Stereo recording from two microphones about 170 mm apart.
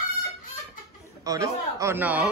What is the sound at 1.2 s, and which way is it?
Speech, 20° right (ahead or behind).